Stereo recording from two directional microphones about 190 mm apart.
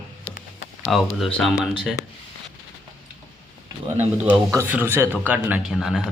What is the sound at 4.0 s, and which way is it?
Speech, 10° right (ahead or behind).